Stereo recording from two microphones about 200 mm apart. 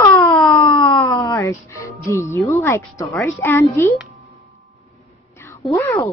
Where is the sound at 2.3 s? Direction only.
15° left (ahead or behind).